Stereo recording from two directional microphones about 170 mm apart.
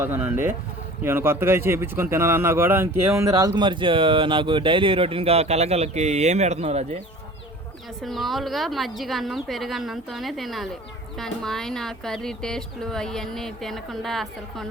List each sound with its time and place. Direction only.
0.0 s speech: 10° right (ahead or behind); by 7.0 s 40° right (ahead or behind)
8.0 s speech: centre (ahead or behind)